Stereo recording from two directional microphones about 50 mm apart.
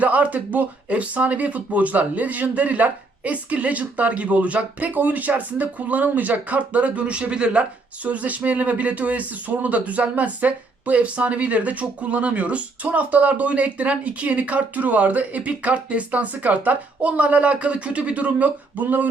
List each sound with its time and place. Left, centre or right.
0.0 s speech: right